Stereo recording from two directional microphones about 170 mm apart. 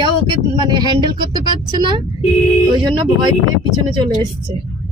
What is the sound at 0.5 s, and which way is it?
Speech, 25° right (ahead or behind).